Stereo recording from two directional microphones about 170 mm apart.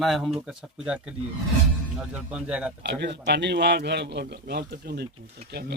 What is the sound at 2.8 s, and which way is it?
A man's voice, 80° right.